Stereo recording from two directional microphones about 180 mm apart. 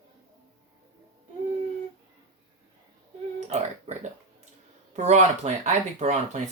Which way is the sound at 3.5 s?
35° right (ahead or behind).